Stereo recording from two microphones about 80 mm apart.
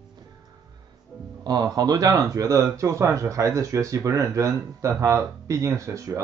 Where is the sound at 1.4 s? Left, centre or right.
Right.